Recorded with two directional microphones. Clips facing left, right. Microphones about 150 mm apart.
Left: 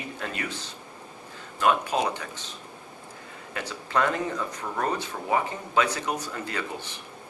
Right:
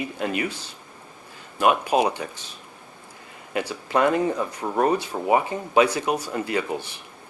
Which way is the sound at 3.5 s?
15° right (ahead or behind).